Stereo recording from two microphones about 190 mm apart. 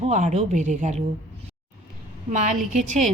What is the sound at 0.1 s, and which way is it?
Speech, 40° right (ahead or behind).